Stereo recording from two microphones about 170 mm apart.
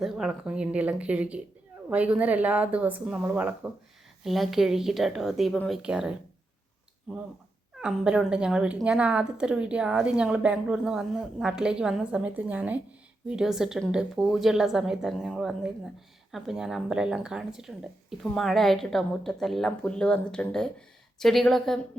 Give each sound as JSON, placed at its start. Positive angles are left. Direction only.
{"t": 0.0, "sound": "speech", "side_deg": -5}
{"t": 7.8, "sound": "speech", "side_deg": -5}